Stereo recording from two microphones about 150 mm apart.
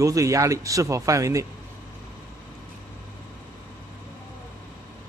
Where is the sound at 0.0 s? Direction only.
20° right (ahead or behind).